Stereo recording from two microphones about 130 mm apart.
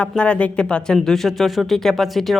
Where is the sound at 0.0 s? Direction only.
10° left (ahead or behind).